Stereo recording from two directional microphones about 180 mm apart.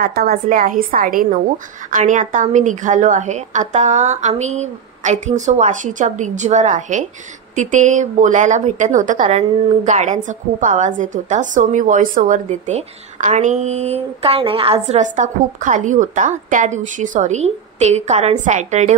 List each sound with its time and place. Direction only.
0.0 s a woman's voice: 55° right (ahead or behind); by 18.9 s 40° right (ahead or behind)